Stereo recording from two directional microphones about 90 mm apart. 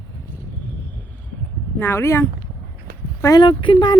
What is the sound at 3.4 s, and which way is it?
Speech, 65° left (ahead or behind).